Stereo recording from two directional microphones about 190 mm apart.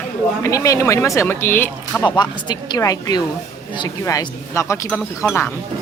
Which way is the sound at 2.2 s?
20° left (ahead or behind).